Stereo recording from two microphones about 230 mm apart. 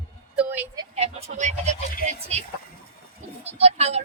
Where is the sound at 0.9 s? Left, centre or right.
Right.